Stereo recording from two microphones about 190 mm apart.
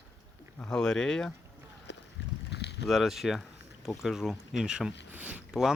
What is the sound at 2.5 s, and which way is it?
Boat, 60° left (ahead or behind).